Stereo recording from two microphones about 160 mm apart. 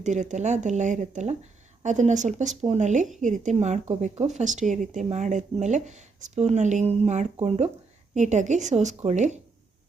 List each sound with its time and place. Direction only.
0.0 s speech: 50° right (ahead or behind)